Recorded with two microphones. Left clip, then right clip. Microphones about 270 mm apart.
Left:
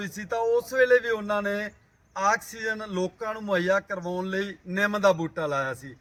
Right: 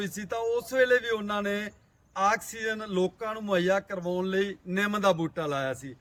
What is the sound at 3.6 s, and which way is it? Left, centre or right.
A man's voice, centre.